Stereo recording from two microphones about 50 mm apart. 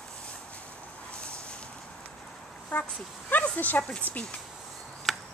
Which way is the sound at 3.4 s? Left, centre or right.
Left.